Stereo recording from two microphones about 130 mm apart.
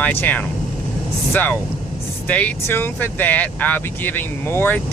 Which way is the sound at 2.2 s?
10° left (ahead or behind).